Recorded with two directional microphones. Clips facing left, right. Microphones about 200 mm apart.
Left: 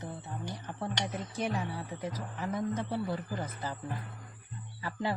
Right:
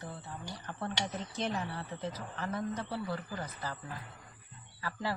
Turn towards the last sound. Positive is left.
turn(degrees=20)  # may be behind; listen again after turning